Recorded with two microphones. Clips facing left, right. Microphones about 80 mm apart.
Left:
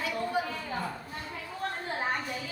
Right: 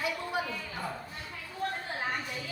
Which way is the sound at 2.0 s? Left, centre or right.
Left.